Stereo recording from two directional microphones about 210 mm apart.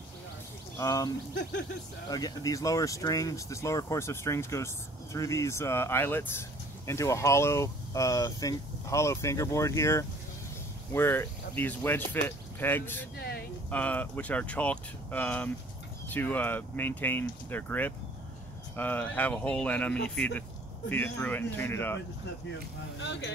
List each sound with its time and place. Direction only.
0.7 s speech: 15° left (ahead or behind)
13.2 s vehicle: 50° left (ahead or behind)
13.7 s speech: 5° left (ahead or behind)
22.5 s speech: 60° left (ahead or behind)